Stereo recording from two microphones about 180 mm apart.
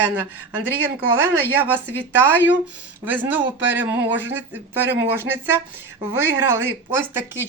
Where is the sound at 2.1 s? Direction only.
10° right (ahead or behind).